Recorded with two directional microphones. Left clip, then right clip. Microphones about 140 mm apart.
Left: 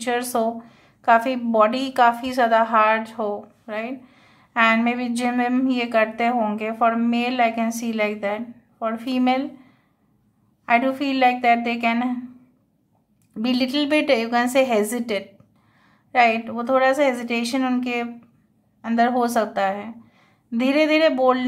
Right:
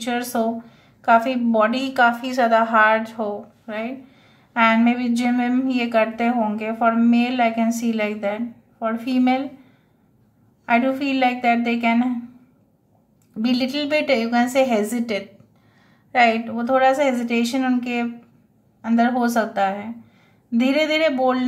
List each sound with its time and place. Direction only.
0.0 s a woman's voice: 35° left (ahead or behind)
10.6 s a woman's voice: 30° left (ahead or behind)
13.4 s a woman's voice: 30° left (ahead or behind)